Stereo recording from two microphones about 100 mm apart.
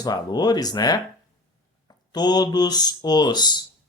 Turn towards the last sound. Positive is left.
turn(degrees=45)  # may be behind; listen again after turning